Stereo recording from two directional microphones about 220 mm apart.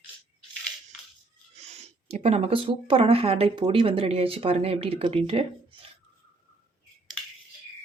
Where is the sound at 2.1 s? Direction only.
30° right (ahead or behind).